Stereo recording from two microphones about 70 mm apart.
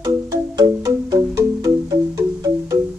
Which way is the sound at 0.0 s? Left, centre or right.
Right.